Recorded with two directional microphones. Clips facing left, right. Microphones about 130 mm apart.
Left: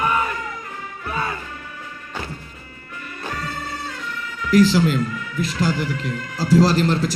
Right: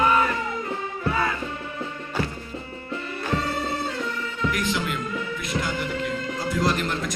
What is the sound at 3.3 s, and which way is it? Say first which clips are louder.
Music: right 4 dB; 25° right (ahead or behind).